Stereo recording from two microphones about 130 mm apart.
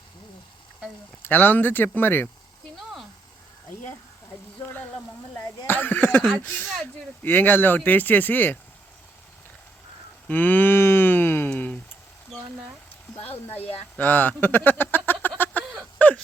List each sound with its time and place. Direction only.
1.2 s speech: 15° left (ahead or behind)
5.6 s a sound: 15° left (ahead or behind)
7.2 s speech: 15° left (ahead or behind)
10.2 s moo: 15° left (ahead or behind)
13.9 s speech: 15° left (ahead or behind)
15.4 s a sound: 10° left (ahead or behind)